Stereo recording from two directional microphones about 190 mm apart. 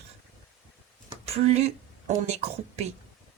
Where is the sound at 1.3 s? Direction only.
35° right (ahead or behind).